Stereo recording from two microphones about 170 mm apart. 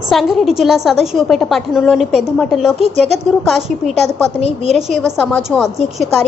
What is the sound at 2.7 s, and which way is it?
Speech, 40° right (ahead or behind).